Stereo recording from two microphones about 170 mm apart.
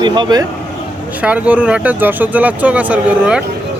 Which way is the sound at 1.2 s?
10° right (ahead or behind).